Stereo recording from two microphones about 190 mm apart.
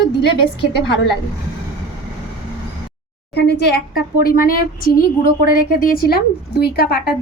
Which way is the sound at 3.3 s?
60° left (ahead or behind).